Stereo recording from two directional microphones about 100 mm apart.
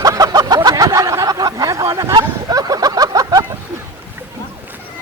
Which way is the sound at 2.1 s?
40° right (ahead or behind).